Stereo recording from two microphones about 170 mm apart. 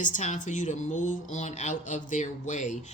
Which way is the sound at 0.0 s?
45° left (ahead or behind).